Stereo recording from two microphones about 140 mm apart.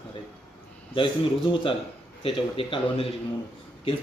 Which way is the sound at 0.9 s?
35° left (ahead or behind).